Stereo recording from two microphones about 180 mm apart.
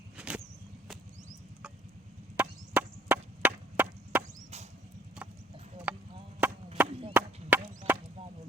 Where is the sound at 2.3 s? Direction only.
10° right (ahead or behind).